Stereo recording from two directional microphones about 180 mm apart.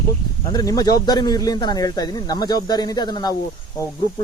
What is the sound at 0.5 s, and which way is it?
Speech, 20° left (ahead or behind).